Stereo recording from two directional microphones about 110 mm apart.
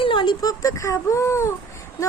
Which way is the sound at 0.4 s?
30° left (ahead or behind).